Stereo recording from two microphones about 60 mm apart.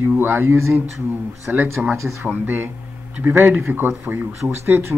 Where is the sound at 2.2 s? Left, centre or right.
Right.